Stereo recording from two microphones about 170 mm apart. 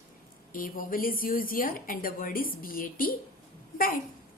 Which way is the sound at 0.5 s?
55° left (ahead or behind).